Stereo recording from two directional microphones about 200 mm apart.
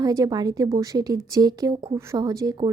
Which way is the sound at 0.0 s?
15° right (ahead or behind).